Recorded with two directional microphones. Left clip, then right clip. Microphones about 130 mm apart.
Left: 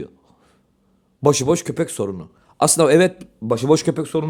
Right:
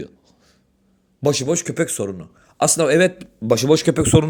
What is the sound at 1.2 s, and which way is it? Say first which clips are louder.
Speech: left 3 dB; 45° left (ahead or behind).